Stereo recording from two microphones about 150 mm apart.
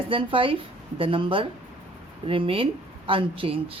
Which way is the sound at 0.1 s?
35° right (ahead or behind).